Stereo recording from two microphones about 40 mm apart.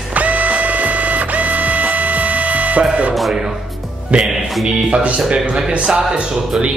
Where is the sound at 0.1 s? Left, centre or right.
Right.